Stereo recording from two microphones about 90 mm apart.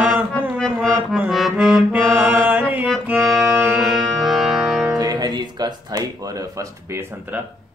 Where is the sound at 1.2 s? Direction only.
5° right (ahead or behind).